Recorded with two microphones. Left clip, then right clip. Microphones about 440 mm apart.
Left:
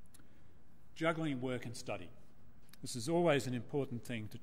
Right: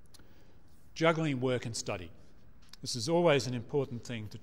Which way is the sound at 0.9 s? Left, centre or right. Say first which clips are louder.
Right 7 dB; right.